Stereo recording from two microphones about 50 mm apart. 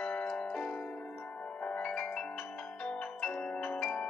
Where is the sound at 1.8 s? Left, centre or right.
Centre.